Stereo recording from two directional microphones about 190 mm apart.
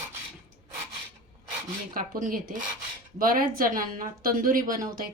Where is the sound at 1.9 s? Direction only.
45° right (ahead or behind).